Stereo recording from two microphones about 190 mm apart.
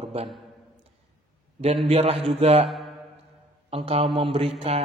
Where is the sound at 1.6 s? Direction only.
35° right (ahead or behind).